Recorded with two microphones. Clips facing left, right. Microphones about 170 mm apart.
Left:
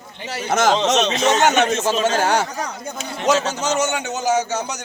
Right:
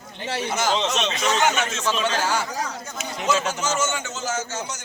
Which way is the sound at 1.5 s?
60° left (ahead or behind).